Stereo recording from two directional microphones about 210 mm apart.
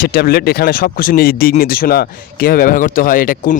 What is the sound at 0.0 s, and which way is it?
Speech, 45° left (ahead or behind).